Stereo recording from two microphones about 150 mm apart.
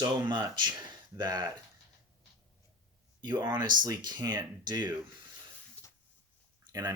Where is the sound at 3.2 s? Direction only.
30° right (ahead or behind).